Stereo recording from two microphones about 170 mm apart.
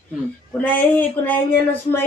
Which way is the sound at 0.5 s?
10° left (ahead or behind).